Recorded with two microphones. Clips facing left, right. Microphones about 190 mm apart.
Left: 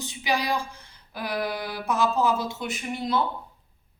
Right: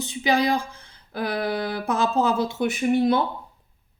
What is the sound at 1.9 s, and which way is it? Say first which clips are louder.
A woman's voice: right 1 dB; 55° right (ahead or behind).